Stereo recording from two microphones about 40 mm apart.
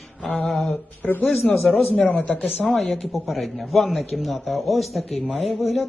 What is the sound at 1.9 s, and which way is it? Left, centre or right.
Speech, left.